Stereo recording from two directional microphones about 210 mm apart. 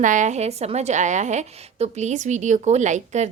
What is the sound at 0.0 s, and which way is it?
A woman's voice, 35° right (ahead or behind).